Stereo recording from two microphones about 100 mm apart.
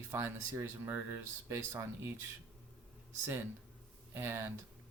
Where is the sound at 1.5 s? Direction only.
25° right (ahead or behind).